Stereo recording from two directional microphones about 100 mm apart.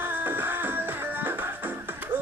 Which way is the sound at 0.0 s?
20° right (ahead or behind).